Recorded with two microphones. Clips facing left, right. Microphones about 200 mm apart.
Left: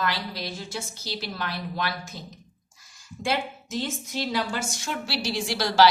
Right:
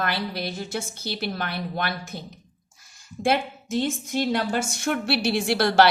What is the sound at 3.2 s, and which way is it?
A woman's voice, 55° right (ahead or behind).